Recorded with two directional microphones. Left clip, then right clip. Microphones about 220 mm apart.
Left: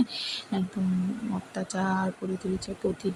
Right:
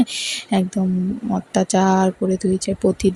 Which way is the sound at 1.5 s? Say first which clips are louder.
Right 13 dB; 30° right (ahead or behind).